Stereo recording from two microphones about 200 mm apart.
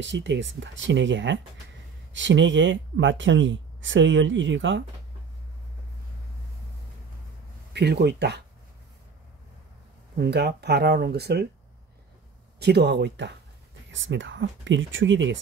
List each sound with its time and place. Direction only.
0.0 s speech: 65° right (ahead or behind)
7.7 s speech: 55° right (ahead or behind)
10.1 s speech: 55° right (ahead or behind)
12.5 s speech: 55° right (ahead or behind)